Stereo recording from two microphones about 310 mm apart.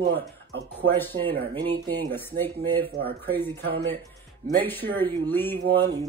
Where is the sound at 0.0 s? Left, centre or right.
Right.